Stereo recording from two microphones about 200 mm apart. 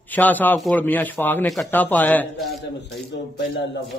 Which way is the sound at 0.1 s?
10° left (ahead or behind).